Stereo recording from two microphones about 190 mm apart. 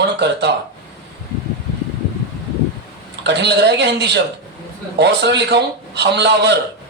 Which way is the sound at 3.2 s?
65° right (ahead or behind).